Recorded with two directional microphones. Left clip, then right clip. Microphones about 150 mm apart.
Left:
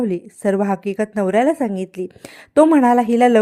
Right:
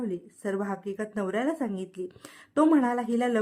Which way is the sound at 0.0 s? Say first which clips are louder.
Left 13 dB; 40° left (ahead or behind).